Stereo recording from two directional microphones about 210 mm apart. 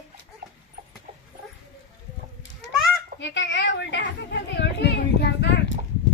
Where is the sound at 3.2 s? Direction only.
60° left (ahead or behind).